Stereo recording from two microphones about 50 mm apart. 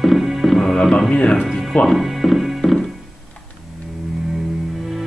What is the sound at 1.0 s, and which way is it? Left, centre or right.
Speech, centre.